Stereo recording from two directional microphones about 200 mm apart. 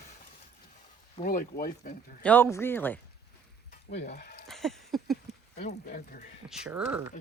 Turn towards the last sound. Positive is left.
turn(degrees=-5)  # may be behind; listen again after turning